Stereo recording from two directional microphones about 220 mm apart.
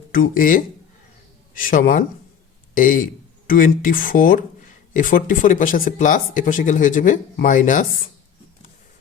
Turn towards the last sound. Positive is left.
turn(degrees=35)  # may be behind; listen again after turning